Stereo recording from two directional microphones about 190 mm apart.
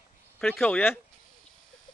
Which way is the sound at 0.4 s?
5° left (ahead or behind).